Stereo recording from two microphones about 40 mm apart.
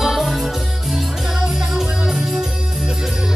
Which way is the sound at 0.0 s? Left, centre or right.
Centre.